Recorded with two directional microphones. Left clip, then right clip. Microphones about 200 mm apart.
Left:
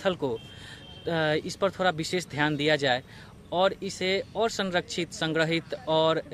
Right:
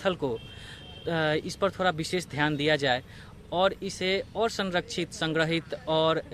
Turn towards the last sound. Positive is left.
turn(degrees=5)  # may be behind; listen again after turning